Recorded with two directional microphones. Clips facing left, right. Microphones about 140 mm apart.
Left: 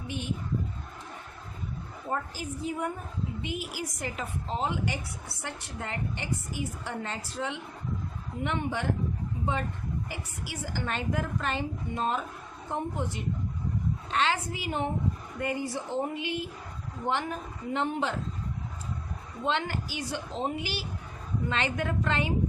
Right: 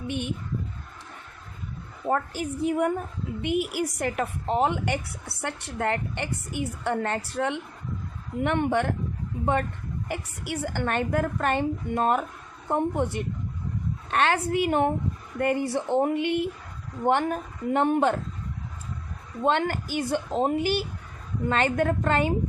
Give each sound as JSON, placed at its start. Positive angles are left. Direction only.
{"t": 0.1, "sound": "a woman's voice", "side_deg": -65}
{"t": 2.0, "sound": "a woman's voice", "side_deg": -65}
{"t": 10.1, "sound": "a woman's voice", "side_deg": -60}
{"t": 19.5, "sound": "a woman's voice", "side_deg": -50}